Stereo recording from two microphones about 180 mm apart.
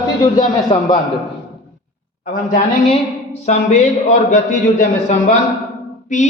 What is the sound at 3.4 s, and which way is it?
A man's voice, 40° left (ahead or behind).